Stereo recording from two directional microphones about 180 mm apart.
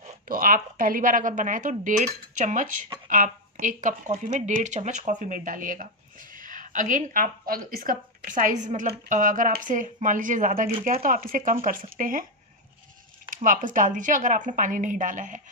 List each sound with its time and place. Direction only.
0.3 s speech: 50° right (ahead or behind)
13.3 s speech: 45° right (ahead or behind)